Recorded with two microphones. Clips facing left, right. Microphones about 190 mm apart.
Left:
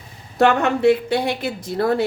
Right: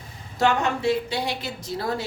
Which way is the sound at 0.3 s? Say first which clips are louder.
Left 6 dB; 60° left (ahead or behind).